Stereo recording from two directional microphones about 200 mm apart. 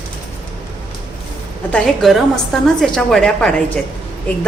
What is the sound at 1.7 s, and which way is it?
A woman's voice, 5° left (ahead or behind).